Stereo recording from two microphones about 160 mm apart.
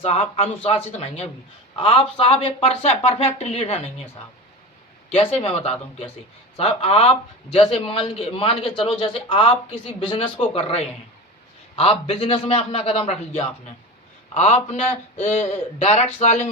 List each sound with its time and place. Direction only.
0.0 s a man's voice: 40° left (ahead or behind)
5.1 s a man's voice: 35° left (ahead or behind)